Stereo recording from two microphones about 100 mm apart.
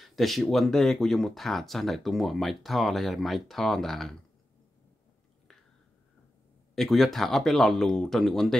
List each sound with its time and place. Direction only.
0.0 s speech: centre (ahead or behind)
6.7 s speech: centre (ahead or behind)